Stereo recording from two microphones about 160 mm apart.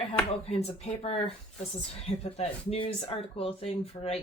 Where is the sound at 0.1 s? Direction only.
40° left (ahead or behind).